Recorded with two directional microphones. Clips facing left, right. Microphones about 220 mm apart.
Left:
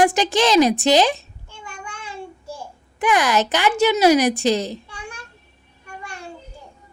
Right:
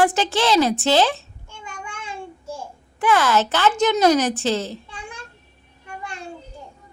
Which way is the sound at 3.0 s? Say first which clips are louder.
Even; 15° left (ahead or behind).